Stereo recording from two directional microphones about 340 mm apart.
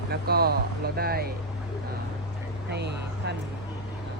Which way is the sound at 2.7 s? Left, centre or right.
Right.